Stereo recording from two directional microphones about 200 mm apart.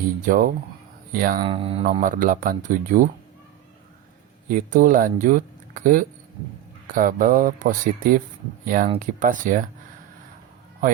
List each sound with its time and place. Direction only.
0.3 s speech: 45° right (ahead or behind)
1.4 s speech: 30° right (ahead or behind)
1.8 s speech: 40° right (ahead or behind)
4.4 s speech: 45° right (ahead or behind)